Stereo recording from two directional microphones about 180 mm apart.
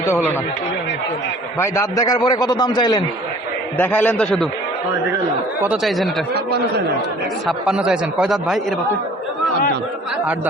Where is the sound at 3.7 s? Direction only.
10° left (ahead or behind).